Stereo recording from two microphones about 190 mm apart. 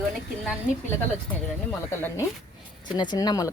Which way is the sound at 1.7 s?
10° left (ahead or behind).